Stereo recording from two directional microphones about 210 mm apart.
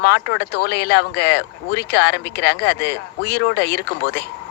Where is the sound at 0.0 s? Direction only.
55° left (ahead or behind).